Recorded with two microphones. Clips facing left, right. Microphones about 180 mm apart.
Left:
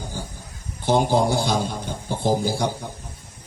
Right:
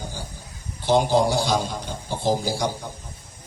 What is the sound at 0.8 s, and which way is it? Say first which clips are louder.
Mantra: even; 55° left (ahead or behind).